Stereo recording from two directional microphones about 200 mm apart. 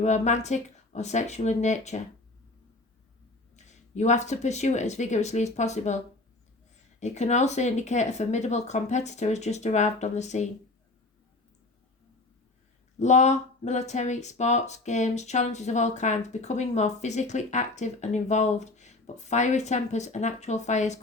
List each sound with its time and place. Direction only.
0.0 s speech: 35° left (ahead or behind)
3.5 s speech: 35° left (ahead or behind)
7.0 s speech: 35° left (ahead or behind)
13.0 s speech: 35° left (ahead or behind)